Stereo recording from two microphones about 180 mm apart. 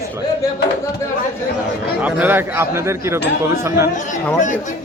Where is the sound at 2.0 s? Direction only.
10° right (ahead or behind).